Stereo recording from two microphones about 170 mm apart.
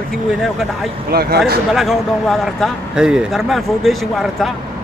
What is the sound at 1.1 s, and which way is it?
Speech, 65° right (ahead or behind).